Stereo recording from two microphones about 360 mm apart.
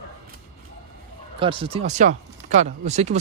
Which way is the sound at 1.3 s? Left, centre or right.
Centre.